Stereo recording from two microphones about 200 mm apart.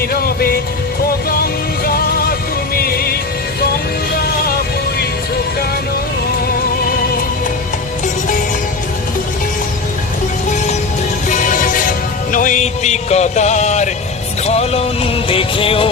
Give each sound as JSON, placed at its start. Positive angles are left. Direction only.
{"t": 0.1, "sound": "music", "side_deg": 50}
{"t": 11.3, "sound": "music", "side_deg": 40}